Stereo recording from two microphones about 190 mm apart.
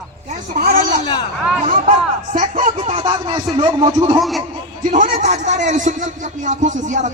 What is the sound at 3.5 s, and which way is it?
Speech, 25° right (ahead or behind).